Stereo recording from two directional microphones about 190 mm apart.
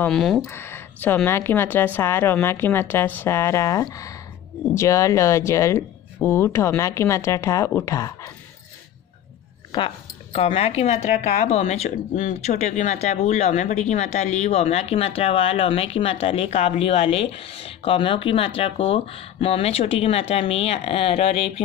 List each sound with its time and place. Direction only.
0.0 s speech: centre (ahead or behind)
0.5 s speech: 10° left (ahead or behind)
9.7 s speech: 25° left (ahead or behind)